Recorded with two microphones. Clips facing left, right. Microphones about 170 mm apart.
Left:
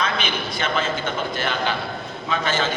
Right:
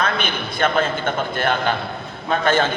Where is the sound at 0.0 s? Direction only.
55° right (ahead or behind).